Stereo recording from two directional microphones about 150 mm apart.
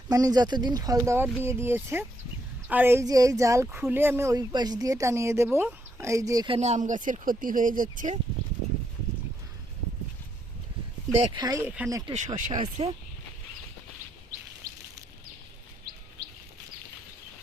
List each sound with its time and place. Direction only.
0.1 s speech: 25° right (ahead or behind)
6.5 s speech: 45° right (ahead or behind); by 8.1 s 65° right (ahead or behind)
11.3 s speech: 25° right (ahead or behind)
11.6 s speech: 10° right (ahead or behind)
11.9 s speech: 25° right (ahead or behind)
12.1 s speech: 55° right (ahead or behind)